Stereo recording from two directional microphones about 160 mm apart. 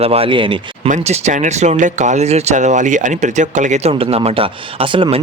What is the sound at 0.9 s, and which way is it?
Speech, 45° right (ahead or behind).